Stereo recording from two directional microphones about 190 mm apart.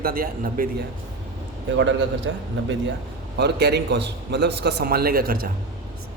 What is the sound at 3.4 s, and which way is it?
A man's voice, 60° right (ahead or behind).